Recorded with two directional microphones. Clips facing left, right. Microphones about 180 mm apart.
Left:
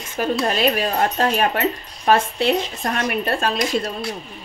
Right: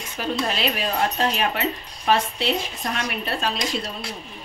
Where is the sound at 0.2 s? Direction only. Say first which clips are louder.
Left 5 dB; 50° left (ahead or behind).